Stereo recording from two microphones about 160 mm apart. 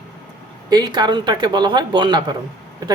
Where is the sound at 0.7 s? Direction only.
25° right (ahead or behind).